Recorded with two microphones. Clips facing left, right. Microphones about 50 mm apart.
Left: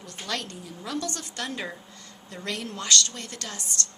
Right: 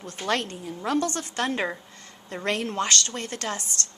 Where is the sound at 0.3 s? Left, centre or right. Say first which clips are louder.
Right 7 dB; right.